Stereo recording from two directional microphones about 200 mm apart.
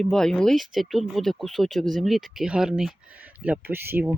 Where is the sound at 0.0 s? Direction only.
5° left (ahead or behind).